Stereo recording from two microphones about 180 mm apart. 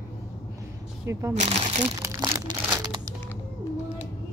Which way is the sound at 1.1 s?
15° right (ahead or behind).